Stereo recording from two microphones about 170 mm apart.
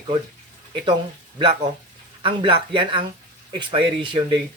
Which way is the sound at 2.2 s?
30° right (ahead or behind).